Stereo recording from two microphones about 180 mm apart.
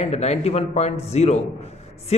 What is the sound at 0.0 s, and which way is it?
A man's voice, 35° left (ahead or behind).